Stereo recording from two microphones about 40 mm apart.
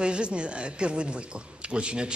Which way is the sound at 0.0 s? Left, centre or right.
Right.